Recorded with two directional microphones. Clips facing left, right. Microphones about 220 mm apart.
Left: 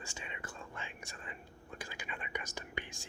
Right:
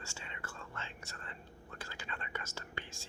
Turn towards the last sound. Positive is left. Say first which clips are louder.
# left 3 dB
turn(degrees=15)  # may be behind; listen again after turning